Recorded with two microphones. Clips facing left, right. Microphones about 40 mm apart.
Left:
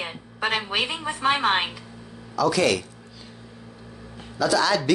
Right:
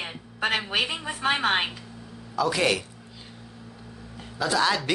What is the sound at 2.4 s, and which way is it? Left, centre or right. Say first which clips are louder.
Speech: left 3 dB; right.